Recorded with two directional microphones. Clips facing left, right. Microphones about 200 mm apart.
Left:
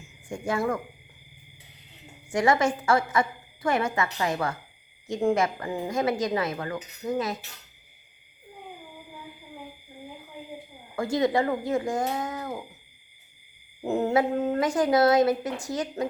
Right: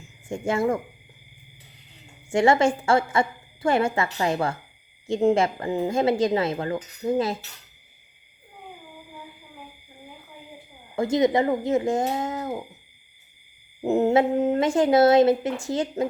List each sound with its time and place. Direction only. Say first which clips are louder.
0.3 s speech: right 4 dB; 25° right (ahead or behind)
2.3 s speech: right 4 dB; 25° right (ahead or behind)
10.9 s speech: right 4 dB; 20° right (ahead or behind)
13.8 s speech: right 4 dB; 20° right (ahead or behind)